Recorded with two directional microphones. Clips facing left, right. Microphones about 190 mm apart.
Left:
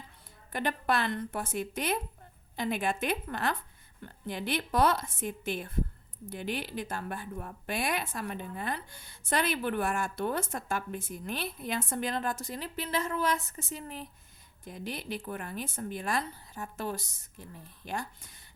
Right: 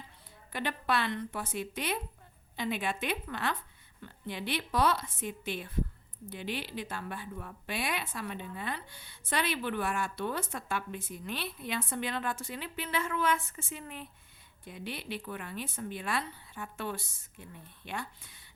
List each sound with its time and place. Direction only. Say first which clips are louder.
0.5 s speech: left 2 dB; 45° left (ahead or behind)